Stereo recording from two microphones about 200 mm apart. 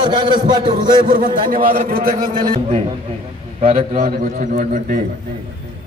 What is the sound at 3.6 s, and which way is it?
A man's voice, 40° right (ahead or behind).